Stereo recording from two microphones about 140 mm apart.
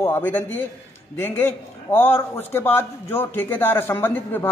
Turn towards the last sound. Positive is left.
turn(degrees=15)  # may be behind; listen again after turning